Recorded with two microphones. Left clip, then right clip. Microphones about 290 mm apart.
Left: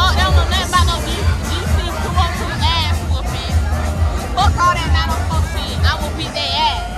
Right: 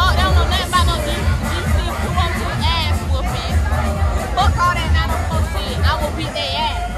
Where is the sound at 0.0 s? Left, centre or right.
Centre.